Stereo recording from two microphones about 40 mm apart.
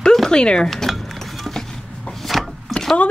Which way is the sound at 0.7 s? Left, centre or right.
Centre.